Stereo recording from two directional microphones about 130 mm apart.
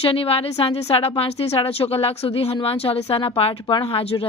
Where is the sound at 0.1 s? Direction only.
45° left (ahead or behind).